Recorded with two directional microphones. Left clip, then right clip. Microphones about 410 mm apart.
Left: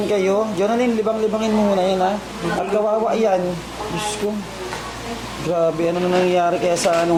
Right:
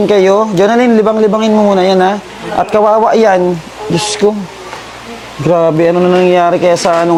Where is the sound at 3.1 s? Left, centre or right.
Right.